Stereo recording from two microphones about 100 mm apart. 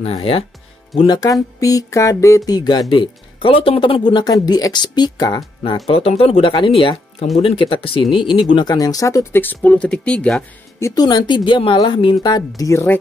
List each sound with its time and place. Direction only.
0.0 s speech: 80° left
1.0 s speech: 40° left (ahead or behind)
5.9 s speech: 80° left; by 8.7 s 55° left (ahead or behind)
8.7 s speech: 35° left (ahead or behind)
9.3 s speech: 20° left (ahead or behind)
11.0 s speech: 45° left (ahead or behind); by 13.0 s 25° left (ahead or behind)